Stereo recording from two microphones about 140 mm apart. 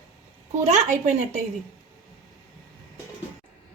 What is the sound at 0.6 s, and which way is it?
Speech, 55° right (ahead or behind).